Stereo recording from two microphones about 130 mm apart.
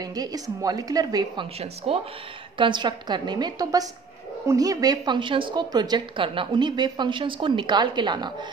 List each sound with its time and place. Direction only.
0.0 s a woman's voice: 30° right (ahead or behind)
1.9 s speech: 50° right (ahead or behind)
2.5 s a woman's voice: 40° right (ahead or behind)